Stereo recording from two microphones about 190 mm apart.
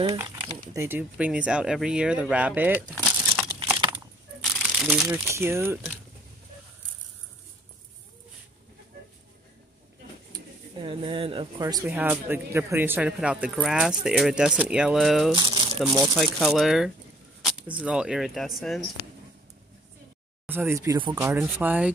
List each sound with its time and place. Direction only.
0.0 s speech: 15° right (ahead or behind)
3.4 s crumpling: 20° right (ahead or behind)
4.6 s speech: 5° right (ahead or behind)
10.3 s speech: 25° right (ahead or behind)
11.6 s speech: 15° right (ahead or behind)
15.3 s crumpling: 25° right (ahead or behind)
15.8 s speech: 15° right (ahead or behind)
16.2 s speech: centre (ahead or behind)
20.4 s speech: 10° right (ahead or behind)